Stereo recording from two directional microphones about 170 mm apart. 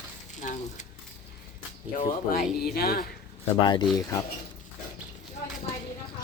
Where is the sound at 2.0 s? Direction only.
55° left (ahead or behind).